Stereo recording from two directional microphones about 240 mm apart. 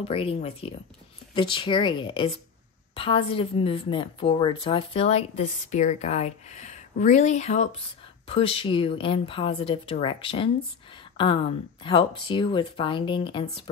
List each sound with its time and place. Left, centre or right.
0.0 s a woman's voice: left